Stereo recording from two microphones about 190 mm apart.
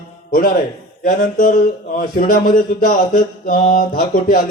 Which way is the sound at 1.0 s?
45° left (ahead or behind).